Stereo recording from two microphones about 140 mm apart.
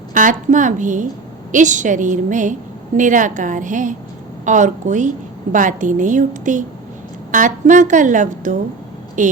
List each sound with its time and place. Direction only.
0.1 s a woman's voice: 70° right (ahead or behind)